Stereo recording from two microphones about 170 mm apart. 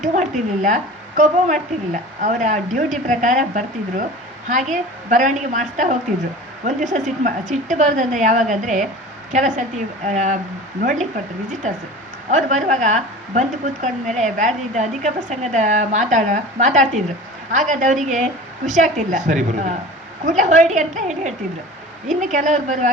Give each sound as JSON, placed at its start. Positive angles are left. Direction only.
{"t": 0.0, "sound": "a woman's voice", "side_deg": -45}
{"t": 12.3, "sound": "a woman's voice", "side_deg": -45}